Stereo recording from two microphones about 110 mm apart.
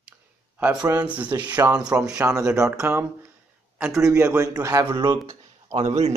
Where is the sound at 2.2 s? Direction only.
30° right (ahead or behind).